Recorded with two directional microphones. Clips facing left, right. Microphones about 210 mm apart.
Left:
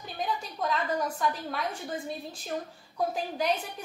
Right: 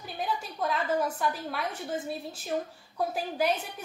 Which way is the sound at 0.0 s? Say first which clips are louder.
Even; 5° right (ahead or behind).